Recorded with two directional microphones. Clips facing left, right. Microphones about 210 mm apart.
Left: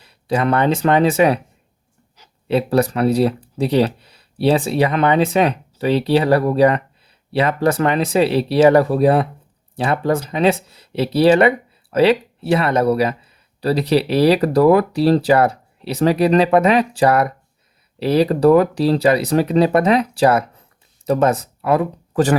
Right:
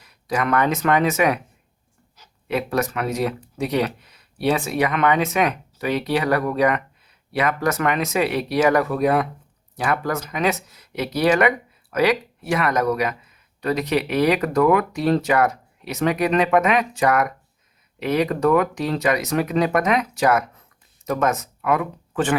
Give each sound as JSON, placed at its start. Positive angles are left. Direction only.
{"t": 0.0, "sound": "speech", "side_deg": 30}
{"t": 2.5, "sound": "speech", "side_deg": 30}